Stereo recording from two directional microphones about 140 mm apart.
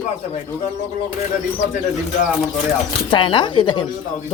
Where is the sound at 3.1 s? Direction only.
35° left (ahead or behind).